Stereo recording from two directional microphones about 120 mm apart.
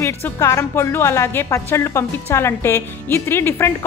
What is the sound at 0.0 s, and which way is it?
Speech, 25° left (ahead or behind).